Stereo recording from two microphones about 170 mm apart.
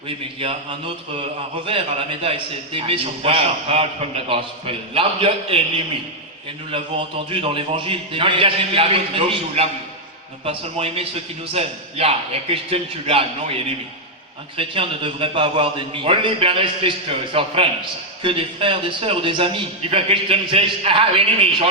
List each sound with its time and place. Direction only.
0.1 s a man's voice: 30° right (ahead or behind)
6.7 s a man's voice: 30° right (ahead or behind)